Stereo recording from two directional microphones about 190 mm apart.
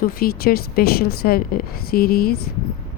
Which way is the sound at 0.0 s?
50° left (ahead or behind).